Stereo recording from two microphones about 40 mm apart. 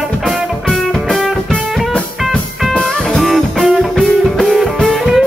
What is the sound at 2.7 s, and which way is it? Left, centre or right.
Music, centre.